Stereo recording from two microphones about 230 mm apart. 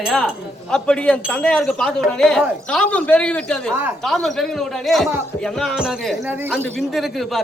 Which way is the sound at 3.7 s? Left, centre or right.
Centre.